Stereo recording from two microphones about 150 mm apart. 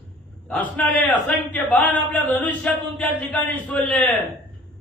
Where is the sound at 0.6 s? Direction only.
10° left (ahead or behind).